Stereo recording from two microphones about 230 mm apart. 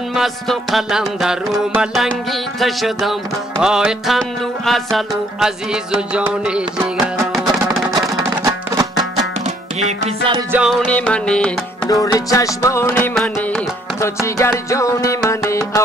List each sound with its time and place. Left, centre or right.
0.1 s music: centre
8.7 s music: centre
10.5 s music: centre
11.9 s music: centre